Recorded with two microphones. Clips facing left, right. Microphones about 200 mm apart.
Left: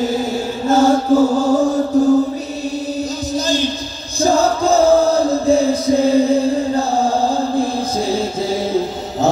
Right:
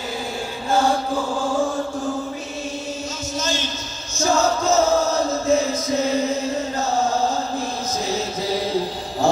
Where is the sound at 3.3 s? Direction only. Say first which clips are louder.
Left 7 dB; 35° left (ahead or behind).